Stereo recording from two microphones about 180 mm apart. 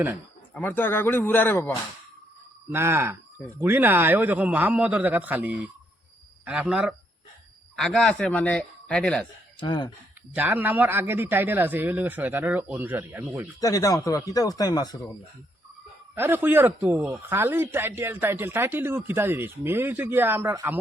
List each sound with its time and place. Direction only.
0.5 s speech: 10° left (ahead or behind)
2.7 s a man's voice: 15° right (ahead or behind); by 9.2 s 5° left (ahead or behind)
9.6 s speech: 25° left (ahead or behind)
10.3 s a man's voice: 10° right (ahead or behind)
13.6 s speech: 20° left (ahead or behind)
16.1 s a man's voice: 10° right (ahead or behind)